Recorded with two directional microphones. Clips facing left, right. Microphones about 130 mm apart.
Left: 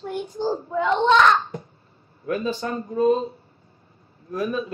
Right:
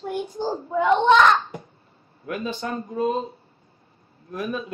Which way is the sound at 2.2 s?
35° left (ahead or behind).